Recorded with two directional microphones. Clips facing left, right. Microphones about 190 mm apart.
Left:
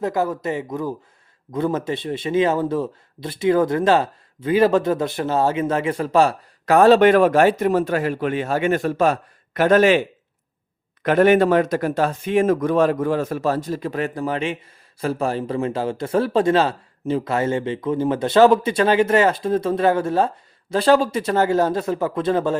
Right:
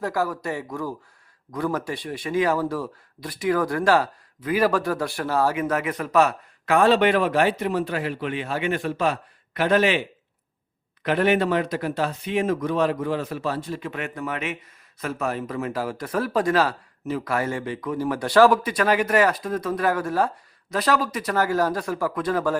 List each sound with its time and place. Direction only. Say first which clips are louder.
0.0 s a man's voice: left 4 dB; 20° left (ahead or behind)